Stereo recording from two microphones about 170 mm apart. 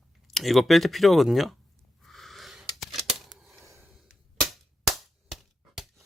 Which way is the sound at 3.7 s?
15° right (ahead or behind).